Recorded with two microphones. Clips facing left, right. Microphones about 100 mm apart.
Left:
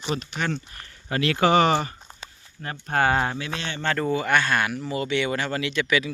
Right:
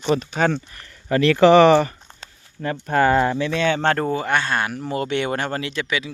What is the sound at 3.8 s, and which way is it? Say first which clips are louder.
Speech: right 6 dB; 55° right (ahead or behind).